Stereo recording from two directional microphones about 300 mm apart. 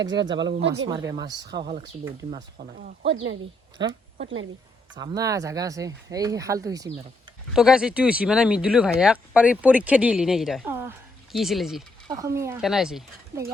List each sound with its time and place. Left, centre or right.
0.3 s speech: right
0.9 s speech: centre
4.2 s speech: right
4.9 s speech: centre
12.0 s speech: centre